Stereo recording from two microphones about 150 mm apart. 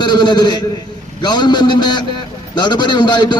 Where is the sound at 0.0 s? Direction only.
30° left (ahead or behind).